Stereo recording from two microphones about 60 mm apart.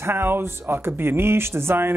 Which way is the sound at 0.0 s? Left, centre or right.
Right.